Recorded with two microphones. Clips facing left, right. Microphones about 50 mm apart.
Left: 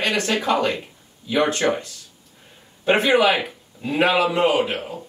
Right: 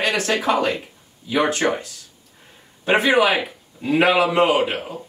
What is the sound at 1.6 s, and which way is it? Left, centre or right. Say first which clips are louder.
Speech: even; centre.